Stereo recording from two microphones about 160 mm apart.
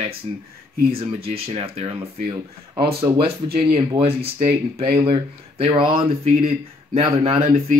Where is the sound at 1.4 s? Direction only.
35° right (ahead or behind).